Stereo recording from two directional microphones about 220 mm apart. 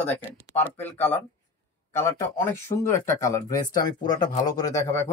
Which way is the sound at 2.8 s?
15° left (ahead or behind).